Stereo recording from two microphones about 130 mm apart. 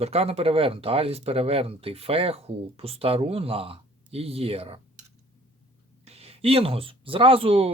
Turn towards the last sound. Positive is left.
turn(degrees=-50)  # may be behind; listen again after turning